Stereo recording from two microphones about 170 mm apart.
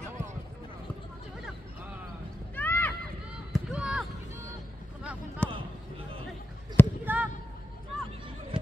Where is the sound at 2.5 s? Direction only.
10° left (ahead or behind).